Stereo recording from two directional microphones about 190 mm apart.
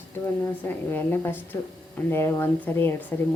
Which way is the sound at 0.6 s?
10° left (ahead or behind).